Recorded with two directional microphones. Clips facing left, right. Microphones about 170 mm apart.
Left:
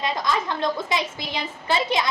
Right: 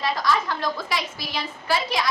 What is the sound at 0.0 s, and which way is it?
A woman's voice, 20° left (ahead or behind).